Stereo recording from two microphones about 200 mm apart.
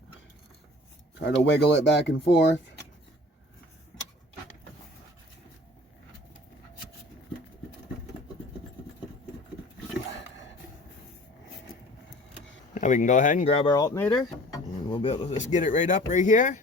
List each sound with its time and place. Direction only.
1.2 s speech: 60° left (ahead or behind)
10.1 s roaring cats: 65° left (ahead or behind)
12.7 s speech: 40° left (ahead or behind)
13.7 s speech: 15° left (ahead or behind)
14.8 s speech: 25° left (ahead or behind)
15.4 s speech: 35° left (ahead or behind)